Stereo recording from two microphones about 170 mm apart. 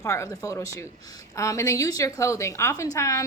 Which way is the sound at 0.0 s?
20° left (ahead or behind).